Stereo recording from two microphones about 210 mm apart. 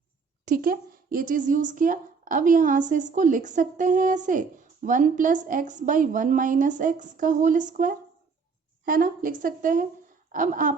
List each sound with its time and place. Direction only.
0.4 s speech: 45° right (ahead or behind)